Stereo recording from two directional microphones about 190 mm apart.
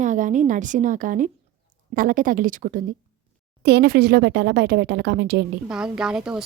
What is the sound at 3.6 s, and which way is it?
Speech, 60° right (ahead or behind).